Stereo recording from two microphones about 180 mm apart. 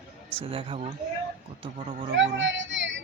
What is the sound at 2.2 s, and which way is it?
Speech, 90° right.